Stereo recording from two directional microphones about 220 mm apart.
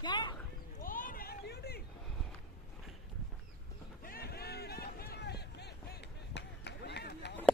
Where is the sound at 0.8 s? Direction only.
40° left (ahead or behind).